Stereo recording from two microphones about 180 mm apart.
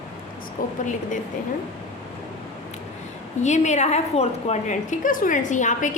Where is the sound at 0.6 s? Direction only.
50° left (ahead or behind).